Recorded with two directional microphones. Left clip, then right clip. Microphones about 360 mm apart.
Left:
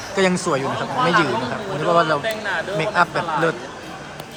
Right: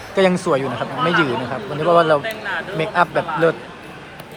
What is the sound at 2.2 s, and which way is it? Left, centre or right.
Speech, left.